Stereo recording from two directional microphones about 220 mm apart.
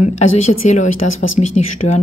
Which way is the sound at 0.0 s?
30° left (ahead or behind).